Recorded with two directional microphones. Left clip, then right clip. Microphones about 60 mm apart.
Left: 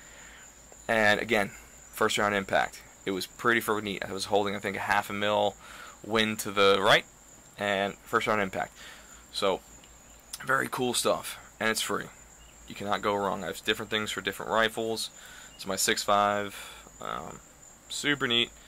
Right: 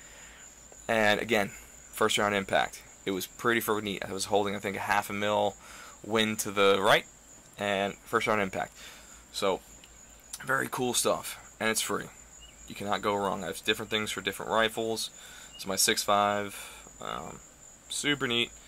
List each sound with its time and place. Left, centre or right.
0.8 s speech: right
2.0 s speech: right
9.3 s speech: centre